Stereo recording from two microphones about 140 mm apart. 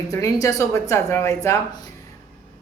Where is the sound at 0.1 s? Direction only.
25° left (ahead or behind).